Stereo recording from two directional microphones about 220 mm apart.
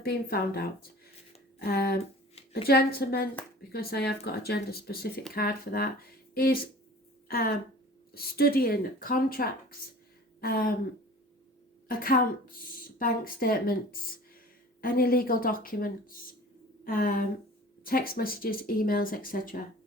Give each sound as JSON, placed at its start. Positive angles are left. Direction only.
{"t": 0.0, "sound": "speech", "side_deg": 45}
{"t": 11.9, "sound": "speech", "side_deg": 40}
{"t": 14.8, "sound": "speech", "side_deg": 40}